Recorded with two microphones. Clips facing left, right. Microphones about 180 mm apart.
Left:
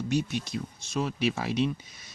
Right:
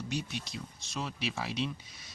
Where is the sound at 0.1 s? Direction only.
50° left (ahead or behind).